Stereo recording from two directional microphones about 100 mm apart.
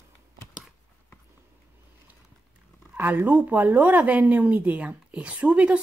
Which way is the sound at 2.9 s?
15° right (ahead or behind).